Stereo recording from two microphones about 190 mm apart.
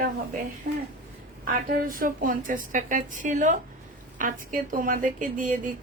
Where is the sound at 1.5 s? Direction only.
45° right (ahead or behind).